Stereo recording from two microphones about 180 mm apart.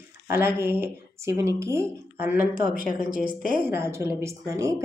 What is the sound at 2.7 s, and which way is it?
Speech, 50° left (ahead or behind).